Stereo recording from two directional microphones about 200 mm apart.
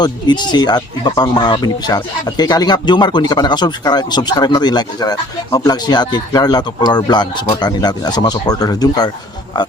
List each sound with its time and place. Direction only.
0.0 s speech: 20° left (ahead or behind)